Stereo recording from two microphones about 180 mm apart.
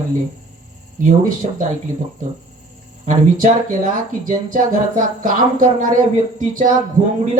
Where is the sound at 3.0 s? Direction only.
45° right (ahead or behind).